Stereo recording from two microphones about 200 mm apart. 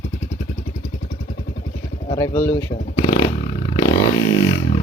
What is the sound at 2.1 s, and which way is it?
Speech, 15° left (ahead or behind).